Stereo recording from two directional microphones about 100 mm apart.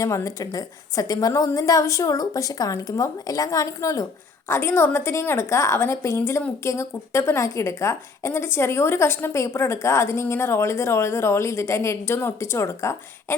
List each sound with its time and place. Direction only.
0.0 s a woman's voice: 30° left (ahead or behind)